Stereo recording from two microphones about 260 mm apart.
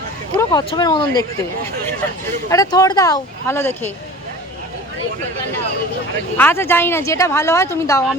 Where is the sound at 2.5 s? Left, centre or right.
Centre.